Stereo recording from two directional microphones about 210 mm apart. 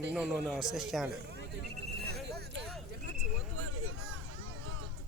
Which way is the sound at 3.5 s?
80° right.